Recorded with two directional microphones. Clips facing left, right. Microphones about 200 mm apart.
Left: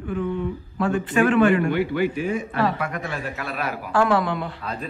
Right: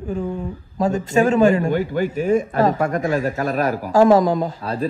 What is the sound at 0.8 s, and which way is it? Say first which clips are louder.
A man's voice: right 3 dB; 40° right (ahead or behind).